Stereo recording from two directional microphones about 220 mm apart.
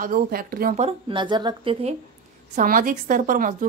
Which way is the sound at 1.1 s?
20° right (ahead or behind).